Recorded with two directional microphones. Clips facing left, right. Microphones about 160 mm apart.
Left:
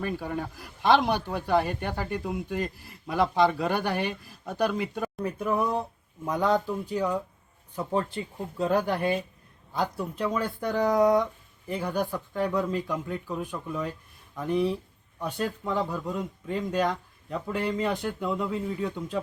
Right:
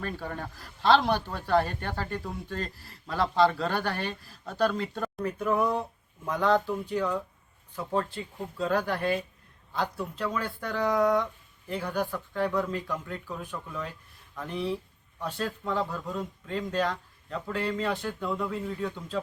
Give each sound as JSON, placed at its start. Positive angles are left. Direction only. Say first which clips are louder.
{"t": 0.0, "sound": "speech", "louder": "left 4 dB", "side_deg": 10}